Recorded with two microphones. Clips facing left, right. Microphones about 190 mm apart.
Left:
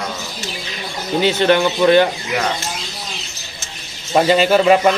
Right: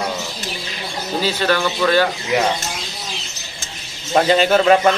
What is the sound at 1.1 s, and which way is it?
Speech, 20° left (ahead or behind).